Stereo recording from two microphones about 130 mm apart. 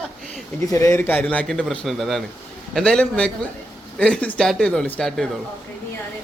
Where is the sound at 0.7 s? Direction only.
20° left (ahead or behind); by 5.2 s 5° left (ahead or behind).